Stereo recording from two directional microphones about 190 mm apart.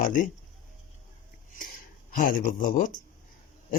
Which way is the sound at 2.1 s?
45° left (ahead or behind).